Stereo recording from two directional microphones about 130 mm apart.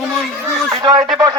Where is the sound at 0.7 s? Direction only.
30° right (ahead or behind).